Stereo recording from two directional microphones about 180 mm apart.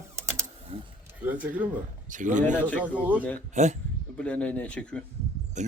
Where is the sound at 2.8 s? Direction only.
10° right (ahead or behind).